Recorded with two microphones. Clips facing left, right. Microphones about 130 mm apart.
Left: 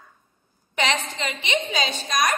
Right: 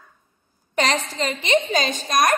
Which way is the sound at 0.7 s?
40° right (ahead or behind).